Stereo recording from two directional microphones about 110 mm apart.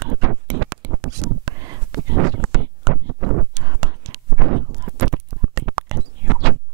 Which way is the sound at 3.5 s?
30° right (ahead or behind).